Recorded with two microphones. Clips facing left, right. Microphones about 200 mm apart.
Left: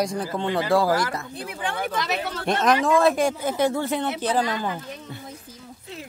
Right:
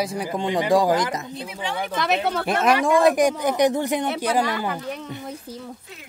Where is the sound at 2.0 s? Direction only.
60° right (ahead or behind).